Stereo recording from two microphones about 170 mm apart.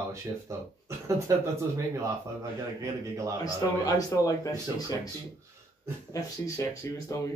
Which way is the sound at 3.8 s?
20° left (ahead or behind).